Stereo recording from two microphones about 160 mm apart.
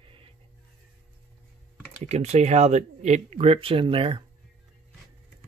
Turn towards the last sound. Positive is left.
turn(degrees=-30)  # may be behind; listen again after turning